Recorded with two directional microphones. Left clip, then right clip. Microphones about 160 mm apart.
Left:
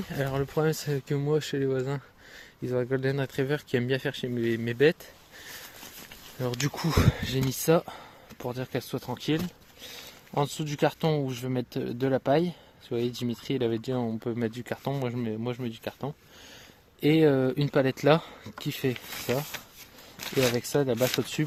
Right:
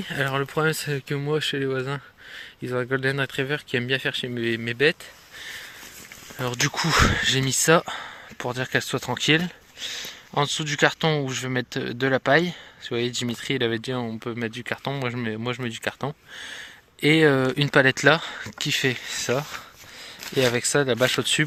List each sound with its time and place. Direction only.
0.1 s speech: 5° left (ahead or behind)
3.5 s speech: 20° left (ahead or behind)
4.6 s speech: 25° left (ahead or behind)
6.7 s speech: 5° left (ahead or behind); by 9.4 s 15° right (ahead or behind)
10.3 s speech: 5° left (ahead or behind)
20.6 s speech: centre (ahead or behind)